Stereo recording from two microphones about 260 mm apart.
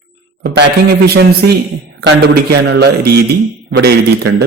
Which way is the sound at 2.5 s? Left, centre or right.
Right.